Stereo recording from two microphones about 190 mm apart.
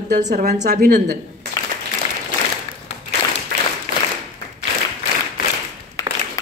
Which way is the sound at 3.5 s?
60° right (ahead or behind).